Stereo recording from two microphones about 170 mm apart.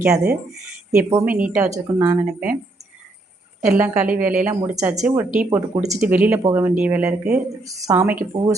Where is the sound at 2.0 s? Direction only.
10° right (ahead or behind).